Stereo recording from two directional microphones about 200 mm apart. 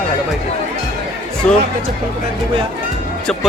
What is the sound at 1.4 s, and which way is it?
Speech, 5° left (ahead or behind).